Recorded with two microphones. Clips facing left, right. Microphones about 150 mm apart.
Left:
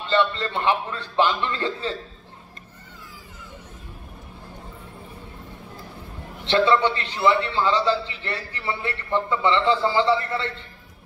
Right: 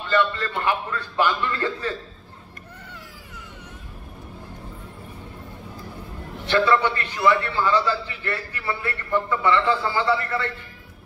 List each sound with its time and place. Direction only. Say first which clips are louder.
0.1 s a man's voice: even; 20° left (ahead or behind)
6.4 s a man's voice: left 1 dB; 25° left (ahead or behind)